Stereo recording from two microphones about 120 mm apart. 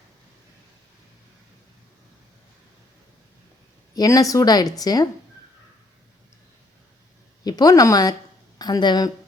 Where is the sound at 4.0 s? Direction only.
30° left (ahead or behind).